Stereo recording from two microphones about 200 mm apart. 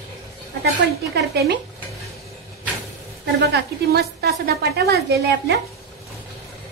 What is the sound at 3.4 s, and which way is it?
A woman's voice, 55° right (ahead or behind).